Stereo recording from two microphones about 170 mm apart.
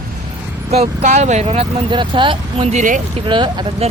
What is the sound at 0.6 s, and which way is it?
Speech, 40° right (ahead or behind).